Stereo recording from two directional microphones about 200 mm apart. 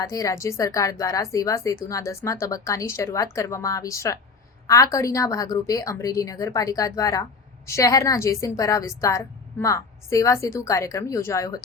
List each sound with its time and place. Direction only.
0.0 s a woman's voice: 15° left (ahead or behind)